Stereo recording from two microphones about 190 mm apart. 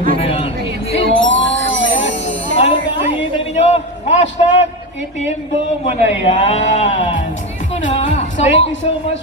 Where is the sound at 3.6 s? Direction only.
35° left (ahead or behind).